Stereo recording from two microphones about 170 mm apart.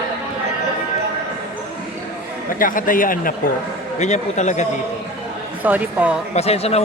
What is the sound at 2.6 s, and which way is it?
Speech, 55° left (ahead or behind).